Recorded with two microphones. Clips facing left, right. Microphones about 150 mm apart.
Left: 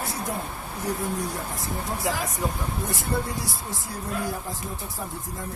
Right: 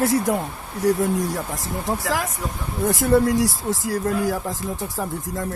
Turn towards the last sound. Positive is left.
turn(degrees=-90)